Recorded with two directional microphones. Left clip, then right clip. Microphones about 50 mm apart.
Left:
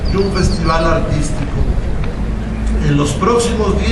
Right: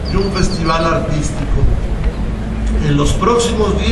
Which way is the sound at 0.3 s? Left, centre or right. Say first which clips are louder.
Even; right.